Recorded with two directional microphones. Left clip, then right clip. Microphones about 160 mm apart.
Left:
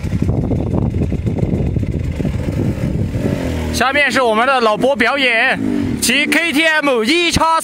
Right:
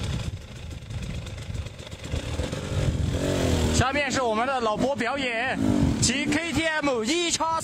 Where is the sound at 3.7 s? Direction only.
40° left (ahead or behind).